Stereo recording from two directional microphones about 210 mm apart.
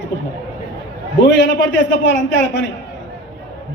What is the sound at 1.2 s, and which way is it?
A man's voice, 55° left (ahead or behind).